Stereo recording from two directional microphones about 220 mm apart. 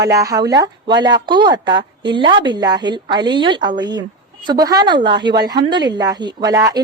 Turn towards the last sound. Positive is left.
turn(degrees=-15)  # may be behind; listen again after turning